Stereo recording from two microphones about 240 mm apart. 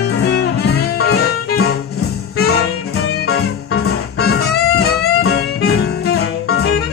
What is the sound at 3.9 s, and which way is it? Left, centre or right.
Music, left.